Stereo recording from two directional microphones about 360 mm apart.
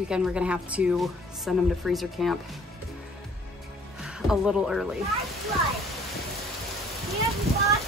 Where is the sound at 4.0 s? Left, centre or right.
Centre.